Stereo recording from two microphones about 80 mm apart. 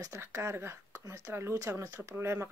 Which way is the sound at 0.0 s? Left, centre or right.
Right.